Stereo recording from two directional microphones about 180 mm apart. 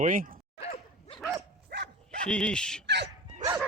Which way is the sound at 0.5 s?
35° left (ahead or behind).